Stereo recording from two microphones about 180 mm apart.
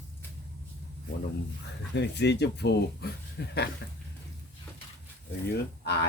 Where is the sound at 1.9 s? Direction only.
70° left (ahead or behind).